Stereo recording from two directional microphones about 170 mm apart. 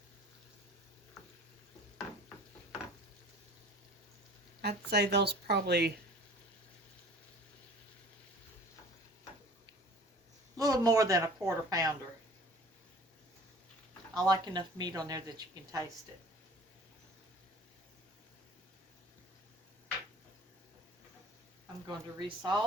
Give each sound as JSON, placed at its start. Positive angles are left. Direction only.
{"t": 4.6, "sound": "speech", "side_deg": -75}
{"t": 10.6, "sound": "a woman's voice", "side_deg": -20}
{"t": 14.3, "sound": "speech", "side_deg": -25}
{"t": 21.8, "sound": "speech", "side_deg": -25}